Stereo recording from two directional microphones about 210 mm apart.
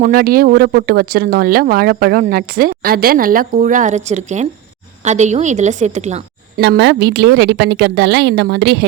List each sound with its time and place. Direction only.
0.0 s a woman's voice: 45° right (ahead or behind)
6.6 s a woman's voice: 55° right (ahead or behind)